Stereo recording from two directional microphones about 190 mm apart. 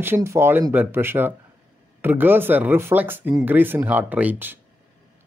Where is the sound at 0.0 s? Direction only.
15° right (ahead or behind).